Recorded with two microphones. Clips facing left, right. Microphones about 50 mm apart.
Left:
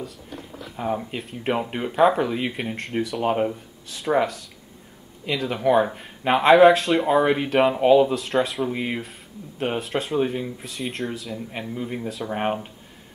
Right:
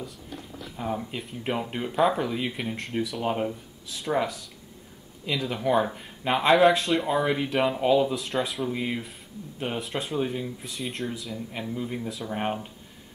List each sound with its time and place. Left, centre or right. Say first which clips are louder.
0.7 s speech: left 4 dB; centre
2.7 s speech: left 3 dB; centre
3.2 s speech: left 7 dB; centre
3.9 s speech: left 5 dB; centre
5.4 s speech: left 5 dB; centre
6.7 s speech: left 5 dB; centre
7.1 s speech: left 6 dB; centre
8.1 s speech: left 5 dB; centre
8.6 s speech: left 3 dB; left
9.8 s speech: left 5 dB; centre
10.1 s speech: left 5 dB; centre
10.6 s speech: left 3 dB; centre
11.3 s speech: left 2 dB; centre